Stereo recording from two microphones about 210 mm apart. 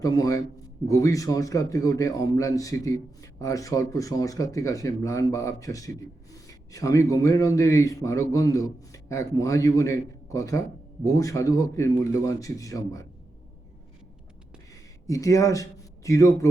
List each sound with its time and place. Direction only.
0.0 s a man's voice: 15° left (ahead or behind)
15.0 s a man's voice: 15° left (ahead or behind)